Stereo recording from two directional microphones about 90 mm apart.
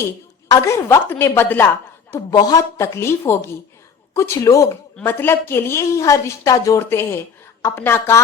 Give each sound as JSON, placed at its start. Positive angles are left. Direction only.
{"t": 0.5, "sound": "a woman's voice", "side_deg": 35}
{"t": 2.1, "sound": "a woman's voice", "side_deg": 45}
{"t": 5.0, "sound": "a woman's voice", "side_deg": 25}